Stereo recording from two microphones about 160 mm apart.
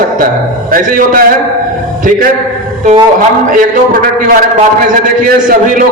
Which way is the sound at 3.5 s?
55° right (ahead or behind).